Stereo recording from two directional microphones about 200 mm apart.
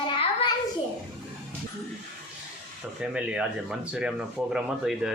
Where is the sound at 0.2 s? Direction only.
30° left (ahead or behind).